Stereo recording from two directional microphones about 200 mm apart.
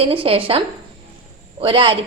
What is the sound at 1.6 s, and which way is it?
Speech, 25° right (ahead or behind).